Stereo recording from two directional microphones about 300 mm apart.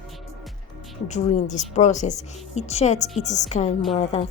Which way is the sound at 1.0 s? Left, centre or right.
Left.